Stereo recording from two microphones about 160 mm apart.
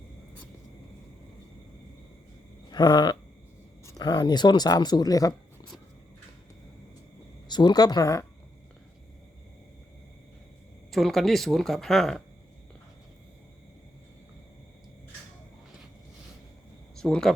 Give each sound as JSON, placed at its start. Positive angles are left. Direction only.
{"t": 2.6, "sound": "a sound", "side_deg": 25}
{"t": 3.8, "sound": "speech", "side_deg": 25}
{"t": 7.4, "sound": "speech", "side_deg": 25}
{"t": 10.9, "sound": "speech", "side_deg": 0}
{"t": 17.0, "sound": "speech", "side_deg": 5}